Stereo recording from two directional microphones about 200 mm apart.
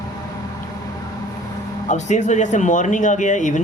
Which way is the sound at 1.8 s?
35° left (ahead or behind).